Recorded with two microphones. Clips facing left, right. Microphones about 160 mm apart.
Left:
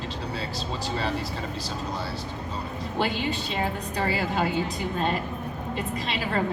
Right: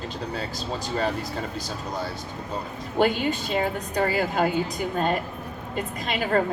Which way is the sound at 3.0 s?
45° right (ahead or behind).